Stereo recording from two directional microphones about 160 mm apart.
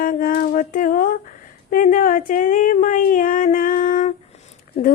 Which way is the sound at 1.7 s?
55° left (ahead or behind).